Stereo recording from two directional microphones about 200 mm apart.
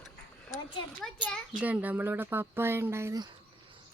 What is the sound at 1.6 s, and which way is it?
Speech, 10° right (ahead or behind).